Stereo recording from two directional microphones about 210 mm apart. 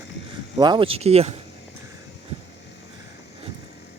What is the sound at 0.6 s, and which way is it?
Speech, 20° right (ahead or behind).